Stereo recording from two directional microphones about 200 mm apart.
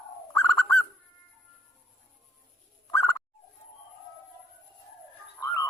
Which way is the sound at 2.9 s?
10° left (ahead or behind).